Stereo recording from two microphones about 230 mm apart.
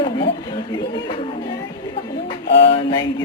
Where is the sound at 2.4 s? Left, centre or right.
Left.